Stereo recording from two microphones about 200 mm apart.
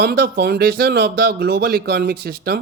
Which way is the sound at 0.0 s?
50° right (ahead or behind).